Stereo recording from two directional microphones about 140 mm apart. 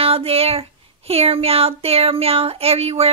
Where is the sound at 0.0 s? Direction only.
45° right (ahead or behind).